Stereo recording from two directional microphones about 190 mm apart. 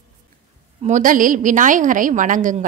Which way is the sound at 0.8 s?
45° right (ahead or behind).